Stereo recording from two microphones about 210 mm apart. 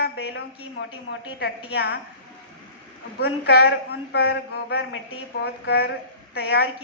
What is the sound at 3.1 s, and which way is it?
A woman's voice, 50° left (ahead or behind).